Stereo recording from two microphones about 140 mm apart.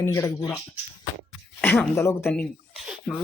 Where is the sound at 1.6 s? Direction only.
15° left (ahead or behind).